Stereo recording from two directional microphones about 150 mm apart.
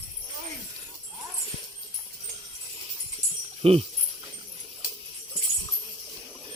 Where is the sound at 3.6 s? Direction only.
40° right (ahead or behind).